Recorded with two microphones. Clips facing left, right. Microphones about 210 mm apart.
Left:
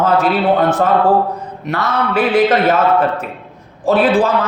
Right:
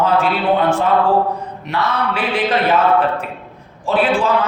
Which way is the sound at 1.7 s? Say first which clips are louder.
Left 2 dB; 45° left (ahead or behind).